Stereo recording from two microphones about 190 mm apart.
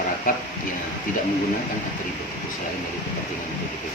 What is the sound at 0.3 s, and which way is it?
Speech, 45° left (ahead or behind).